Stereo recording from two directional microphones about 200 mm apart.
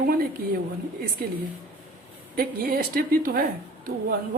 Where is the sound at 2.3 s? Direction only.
45° right (ahead or behind).